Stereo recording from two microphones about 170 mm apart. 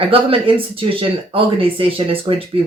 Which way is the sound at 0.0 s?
30° right (ahead or behind).